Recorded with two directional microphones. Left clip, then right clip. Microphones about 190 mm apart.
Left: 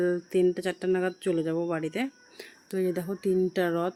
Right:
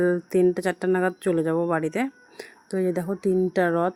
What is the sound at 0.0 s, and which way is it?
Speech, 20° right (ahead or behind).